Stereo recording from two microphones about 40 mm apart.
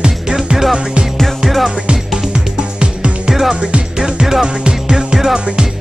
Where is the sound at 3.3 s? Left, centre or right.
Centre.